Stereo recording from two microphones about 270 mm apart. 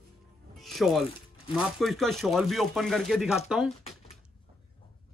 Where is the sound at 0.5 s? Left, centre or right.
Centre.